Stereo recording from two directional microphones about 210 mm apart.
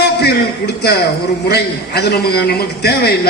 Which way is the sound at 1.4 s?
50° left (ahead or behind).